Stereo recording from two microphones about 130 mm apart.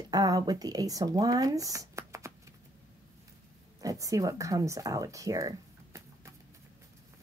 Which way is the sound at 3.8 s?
25° right (ahead or behind).